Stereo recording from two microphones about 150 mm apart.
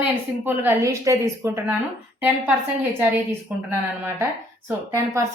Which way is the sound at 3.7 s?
15° right (ahead or behind).